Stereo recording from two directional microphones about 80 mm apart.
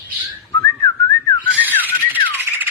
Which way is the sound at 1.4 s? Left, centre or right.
Centre.